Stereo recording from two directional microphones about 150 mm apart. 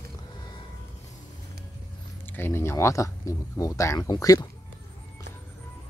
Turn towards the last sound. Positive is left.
turn(degrees=25)  # may be behind; listen again after turning